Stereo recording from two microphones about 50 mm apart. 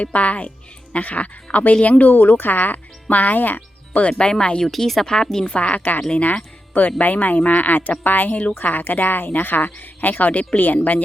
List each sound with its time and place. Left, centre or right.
0.0 s speech: left
4.0 s speech: centre
4.6 s speech: centre
5.5 s speech: left
6.0 s speech: centre
7.0 s speech: left
8.5 s speech: left